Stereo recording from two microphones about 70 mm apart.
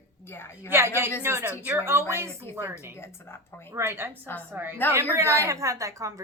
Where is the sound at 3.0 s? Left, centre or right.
Left.